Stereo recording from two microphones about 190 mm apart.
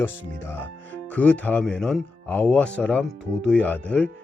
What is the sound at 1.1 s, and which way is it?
Speech, 5° left (ahead or behind).